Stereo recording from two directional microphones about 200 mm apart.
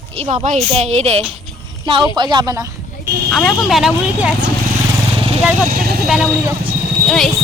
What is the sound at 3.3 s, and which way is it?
Speech, centre (ahead or behind).